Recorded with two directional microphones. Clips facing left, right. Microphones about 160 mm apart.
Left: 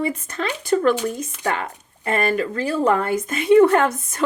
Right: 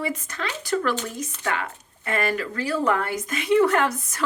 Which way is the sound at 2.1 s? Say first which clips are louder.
Left 5 dB; 25° left (ahead or behind).